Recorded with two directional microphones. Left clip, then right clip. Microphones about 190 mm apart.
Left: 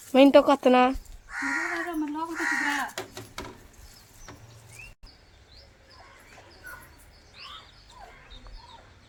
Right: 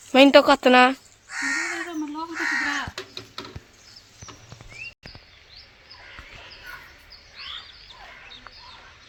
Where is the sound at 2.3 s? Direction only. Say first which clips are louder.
Right 3 dB; 25° left (ahead or behind).